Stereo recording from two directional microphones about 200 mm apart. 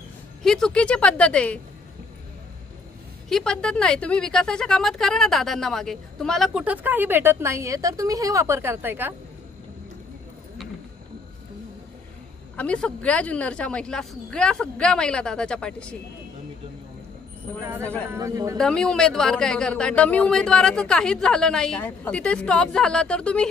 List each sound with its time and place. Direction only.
0.4 s a woman's voice: 5° left (ahead or behind)
3.3 s a woman's voice: 5° left (ahead or behind)
12.5 s a woman's voice: 5° left (ahead or behind)
17.5 s a man's voice: 10° left (ahead or behind)
18.1 s speech: 15° right (ahead or behind)
18.6 s a woman's voice: 5° left (ahead or behind)